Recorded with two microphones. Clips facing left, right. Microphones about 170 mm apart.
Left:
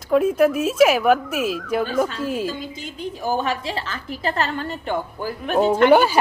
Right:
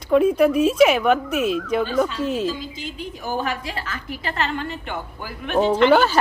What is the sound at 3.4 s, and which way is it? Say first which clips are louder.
A woman's voice: left 2 dB; 30° left (ahead or behind).